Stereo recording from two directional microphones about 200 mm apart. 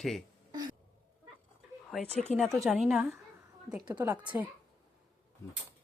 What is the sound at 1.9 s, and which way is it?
Speech, 5° left (ahead or behind).